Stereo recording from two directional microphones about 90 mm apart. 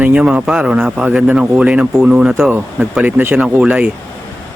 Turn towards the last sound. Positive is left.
turn(degrees=-15)  # may be behind; listen again after turning